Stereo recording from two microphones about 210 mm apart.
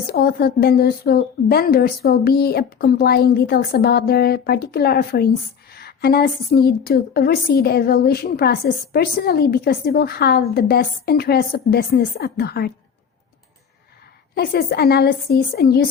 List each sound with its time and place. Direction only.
0.1 s a woman's voice: 50° left (ahead or behind)
14.3 s a woman's voice: 50° left (ahead or behind)